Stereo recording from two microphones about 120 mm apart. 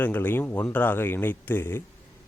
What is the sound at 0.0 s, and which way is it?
Speech, 15° left (ahead or behind).